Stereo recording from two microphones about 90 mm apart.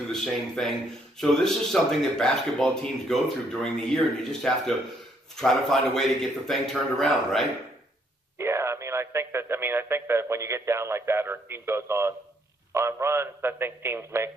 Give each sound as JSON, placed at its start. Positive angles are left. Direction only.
{"t": 0.1, "sound": "speech", "side_deg": 5}
{"t": 8.4, "sound": "a man's voice", "side_deg": -30}